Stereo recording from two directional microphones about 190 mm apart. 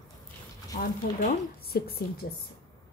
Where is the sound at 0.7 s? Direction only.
50° left (ahead or behind).